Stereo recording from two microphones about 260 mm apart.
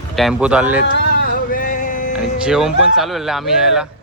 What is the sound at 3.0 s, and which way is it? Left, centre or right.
Speech, centre.